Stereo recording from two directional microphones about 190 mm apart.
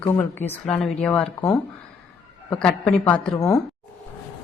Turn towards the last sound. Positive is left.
turn(degrees=20)  # may be behind; listen again after turning